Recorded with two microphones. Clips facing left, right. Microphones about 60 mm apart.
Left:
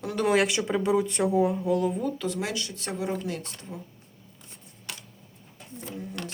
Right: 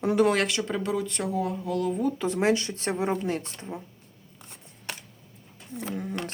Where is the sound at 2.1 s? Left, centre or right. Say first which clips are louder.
Right 6 dB; right.